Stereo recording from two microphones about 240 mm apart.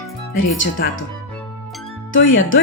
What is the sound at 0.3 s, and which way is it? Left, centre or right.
Speech, left.